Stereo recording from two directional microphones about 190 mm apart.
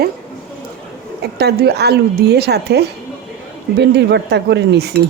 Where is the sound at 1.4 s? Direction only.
60° right (ahead or behind).